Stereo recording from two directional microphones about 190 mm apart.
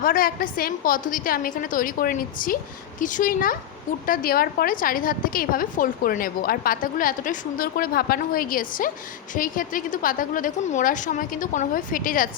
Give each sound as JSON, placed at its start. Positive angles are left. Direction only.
{"t": 0.0, "sound": "a woman's voice", "side_deg": 50}